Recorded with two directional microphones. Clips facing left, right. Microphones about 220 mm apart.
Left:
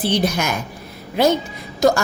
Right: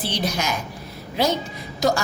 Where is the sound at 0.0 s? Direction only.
55° left (ahead or behind).